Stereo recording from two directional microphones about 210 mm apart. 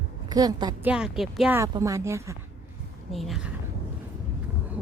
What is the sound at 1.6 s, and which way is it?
Speech, 15° right (ahead or behind).